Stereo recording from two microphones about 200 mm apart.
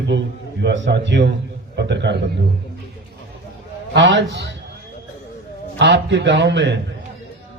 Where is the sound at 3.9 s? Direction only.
65° right (ahead or behind).